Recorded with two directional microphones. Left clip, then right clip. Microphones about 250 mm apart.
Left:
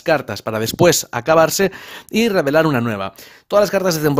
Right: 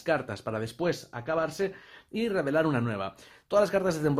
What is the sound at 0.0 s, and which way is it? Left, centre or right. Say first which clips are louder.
Speech: left 11 dB; left.